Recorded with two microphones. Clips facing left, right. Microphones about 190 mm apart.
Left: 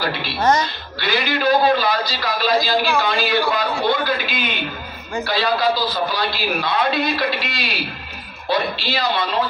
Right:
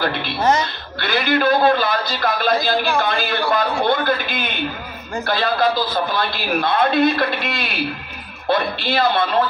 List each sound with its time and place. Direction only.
0.0 s a woman's voice: 55° right (ahead or behind)